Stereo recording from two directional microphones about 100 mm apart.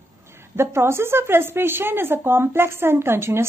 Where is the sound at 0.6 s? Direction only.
25° right (ahead or behind).